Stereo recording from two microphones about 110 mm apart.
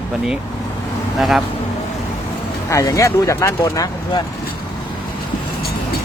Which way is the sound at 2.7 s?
30° left (ahead or behind).